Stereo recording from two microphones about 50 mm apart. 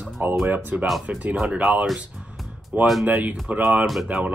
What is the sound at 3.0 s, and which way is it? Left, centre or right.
Speech, right.